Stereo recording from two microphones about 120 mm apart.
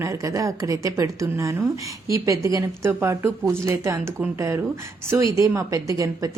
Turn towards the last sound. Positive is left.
turn(degrees=-25)  # may be behind; listen again after turning